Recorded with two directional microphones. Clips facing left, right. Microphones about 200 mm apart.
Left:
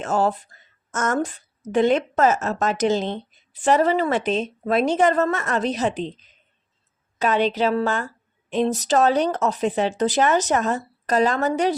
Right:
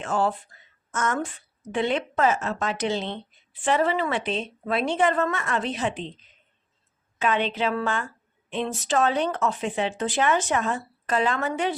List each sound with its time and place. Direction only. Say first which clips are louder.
0.0 s a woman's voice: left 4 dB; 40° left (ahead or behind)
7.2 s a woman's voice: left 4 dB; 40° left (ahead or behind)